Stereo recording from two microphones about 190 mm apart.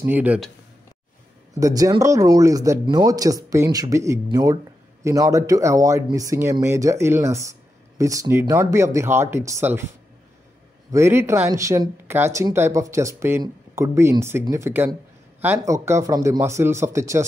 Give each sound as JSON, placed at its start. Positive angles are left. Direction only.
{"t": 0.0, "sound": "speech", "side_deg": -10}
{"t": 1.5, "sound": "speech", "side_deg": -20}
{"t": 10.9, "sound": "speech", "side_deg": -15}